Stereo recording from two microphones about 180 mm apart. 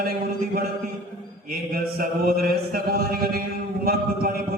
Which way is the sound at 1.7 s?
55° right (ahead or behind).